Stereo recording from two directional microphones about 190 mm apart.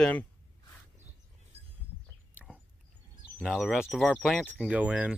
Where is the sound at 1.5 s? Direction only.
35° right (ahead or behind).